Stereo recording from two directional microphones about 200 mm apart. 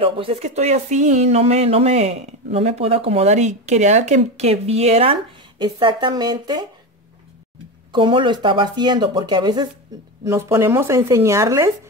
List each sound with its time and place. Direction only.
0.0 s speech: 25° right (ahead or behind)
7.9 s speech: 25° right (ahead or behind)